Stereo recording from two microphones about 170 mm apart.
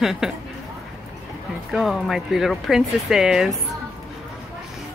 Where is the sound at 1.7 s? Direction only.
Centre (ahead or behind).